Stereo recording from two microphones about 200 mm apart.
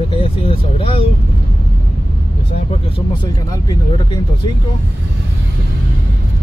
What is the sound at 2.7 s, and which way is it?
Speech, 25° left (ahead or behind).